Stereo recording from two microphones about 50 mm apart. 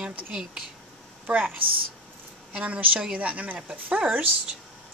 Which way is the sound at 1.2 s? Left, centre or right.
Right.